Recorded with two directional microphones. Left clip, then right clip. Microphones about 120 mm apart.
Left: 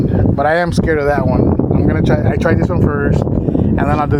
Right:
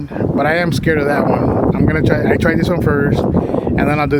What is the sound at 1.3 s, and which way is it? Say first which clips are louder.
Speech: right 1 dB; 45° right (ahead or behind).